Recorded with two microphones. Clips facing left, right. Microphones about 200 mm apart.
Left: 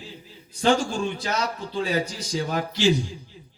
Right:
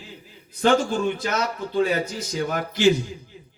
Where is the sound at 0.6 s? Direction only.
55° right (ahead or behind).